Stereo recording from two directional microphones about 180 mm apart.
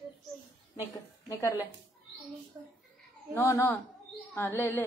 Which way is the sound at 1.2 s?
15° left (ahead or behind).